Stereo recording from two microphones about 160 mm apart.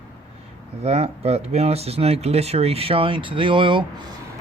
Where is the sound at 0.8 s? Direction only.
40° right (ahead or behind).